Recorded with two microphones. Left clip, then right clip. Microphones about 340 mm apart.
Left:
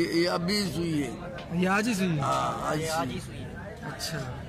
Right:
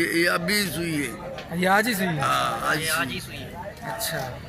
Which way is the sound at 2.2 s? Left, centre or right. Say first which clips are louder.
Right 5 dB; centre.